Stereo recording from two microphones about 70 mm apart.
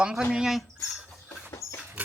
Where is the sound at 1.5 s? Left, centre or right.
Left.